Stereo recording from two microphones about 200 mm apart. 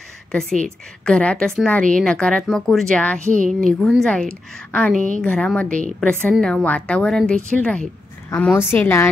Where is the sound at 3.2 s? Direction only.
40° right (ahead or behind).